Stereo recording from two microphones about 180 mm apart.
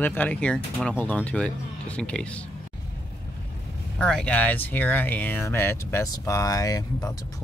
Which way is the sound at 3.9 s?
5° left (ahead or behind).